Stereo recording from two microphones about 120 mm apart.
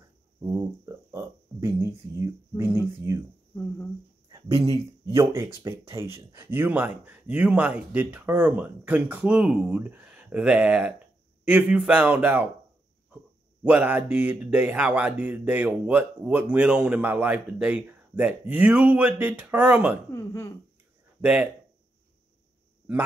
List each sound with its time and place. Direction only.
0.5 s speech: 25° right (ahead or behind)
3.5 s a sound: 20° left (ahead or behind)
4.3 s speech: 30° right (ahead or behind); by 12.4 s 10° right (ahead or behind)
13.7 s speech: 10° right (ahead or behind)
20.1 s speech: 25° left (ahead or behind)
21.2 s speech: 10° right (ahead or behind)